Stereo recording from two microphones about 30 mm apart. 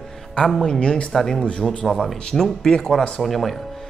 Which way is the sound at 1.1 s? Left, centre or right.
Centre.